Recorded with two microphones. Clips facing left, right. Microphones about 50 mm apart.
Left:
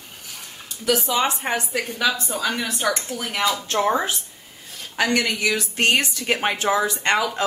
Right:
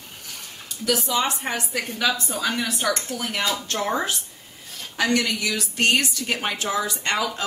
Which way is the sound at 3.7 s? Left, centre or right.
Centre.